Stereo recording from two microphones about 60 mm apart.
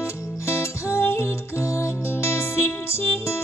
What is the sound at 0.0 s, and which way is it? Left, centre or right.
Music, left.